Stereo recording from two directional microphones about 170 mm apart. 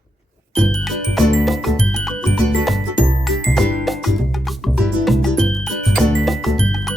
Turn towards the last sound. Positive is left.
turn(degrees=0)  # may be behind; listen again after turning